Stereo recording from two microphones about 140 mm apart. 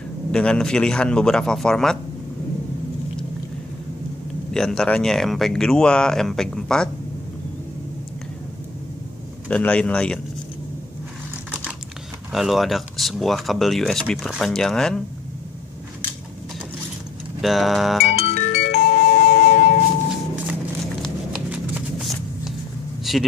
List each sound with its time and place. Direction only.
0.3 s speech: 5° left (ahead or behind)
4.6 s speech: 5° left (ahead or behind)
9.5 s speech: 10° left (ahead or behind)
12.3 s speech: centre (ahead or behind)
17.4 s speech: centre (ahead or behind)
18.1 s music: 50° left (ahead or behind)
18.9 s a sound: 80° left
21.0 s a sound: 5° right (ahead or behind)